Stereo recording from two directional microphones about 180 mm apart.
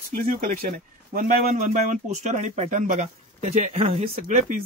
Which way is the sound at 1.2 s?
45° right (ahead or behind).